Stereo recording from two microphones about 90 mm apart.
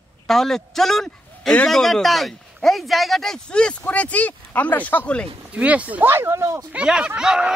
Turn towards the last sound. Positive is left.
turn(degrees=-5)  # may be behind; listen again after turning